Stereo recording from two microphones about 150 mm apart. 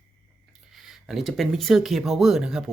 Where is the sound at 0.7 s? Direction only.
Centre (ahead or behind).